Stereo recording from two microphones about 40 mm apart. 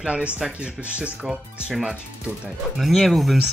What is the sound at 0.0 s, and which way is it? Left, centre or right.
Speech, right.